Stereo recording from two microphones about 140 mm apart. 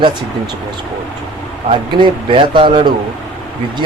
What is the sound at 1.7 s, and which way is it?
Speech, 35° right (ahead or behind).